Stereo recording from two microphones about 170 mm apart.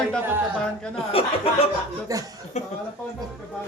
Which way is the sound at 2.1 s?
20° right (ahead or behind).